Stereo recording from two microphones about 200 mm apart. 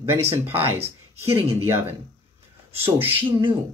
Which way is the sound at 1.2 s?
15° right (ahead or behind).